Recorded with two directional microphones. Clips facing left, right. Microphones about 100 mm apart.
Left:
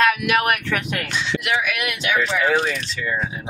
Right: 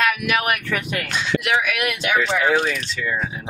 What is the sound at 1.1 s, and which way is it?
Speech, 50° right (ahead or behind).